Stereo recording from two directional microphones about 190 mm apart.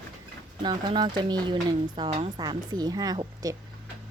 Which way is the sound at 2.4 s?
20° right (ahead or behind).